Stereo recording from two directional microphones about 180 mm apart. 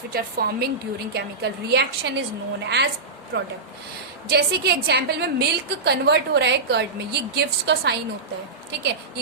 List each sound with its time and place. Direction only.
0.1 s a woman's voice: 55° right (ahead or behind)
3.3 s speech: 90° right
4.3 s a woman's voice: 60° right (ahead or behind)